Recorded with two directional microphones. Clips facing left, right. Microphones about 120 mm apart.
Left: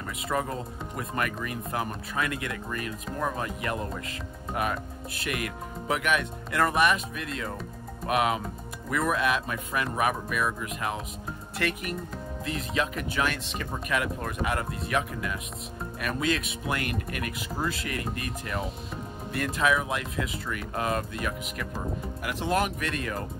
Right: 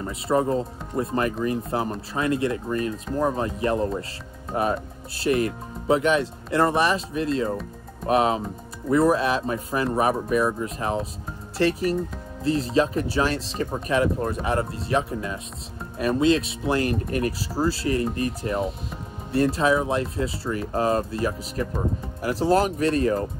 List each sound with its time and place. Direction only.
0.0 s speech: 30° right (ahead or behind)